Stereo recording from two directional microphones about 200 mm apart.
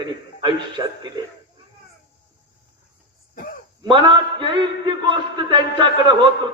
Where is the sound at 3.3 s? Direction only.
45° left (ahead or behind).